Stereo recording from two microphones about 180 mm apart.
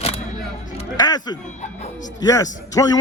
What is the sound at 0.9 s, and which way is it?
Music, 20° left (ahead or behind).